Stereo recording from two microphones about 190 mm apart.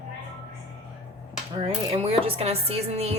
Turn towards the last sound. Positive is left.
turn(degrees=-35)  # may be behind; listen again after turning